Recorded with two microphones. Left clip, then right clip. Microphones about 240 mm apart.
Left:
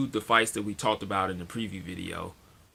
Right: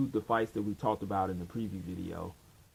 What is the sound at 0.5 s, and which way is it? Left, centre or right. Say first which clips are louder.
Speech: left 4 dB; left.